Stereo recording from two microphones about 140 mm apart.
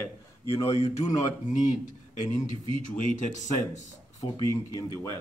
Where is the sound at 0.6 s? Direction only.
45° left (ahead or behind).